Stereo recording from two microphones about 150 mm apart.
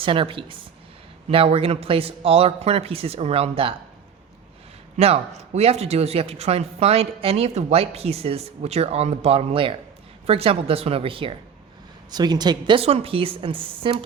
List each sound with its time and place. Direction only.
0.0 s a man's voice: 35° right (ahead or behind)
4.9 s a man's voice: 40° right (ahead or behind)